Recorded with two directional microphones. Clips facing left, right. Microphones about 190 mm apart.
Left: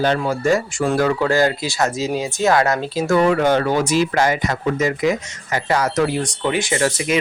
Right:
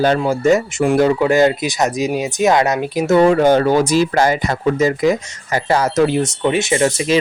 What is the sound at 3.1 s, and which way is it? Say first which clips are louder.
Speech: right 4 dB; 30° right (ahead or behind).